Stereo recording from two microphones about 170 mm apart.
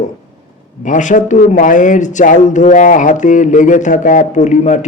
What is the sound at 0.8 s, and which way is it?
A man's voice, 45° left (ahead or behind).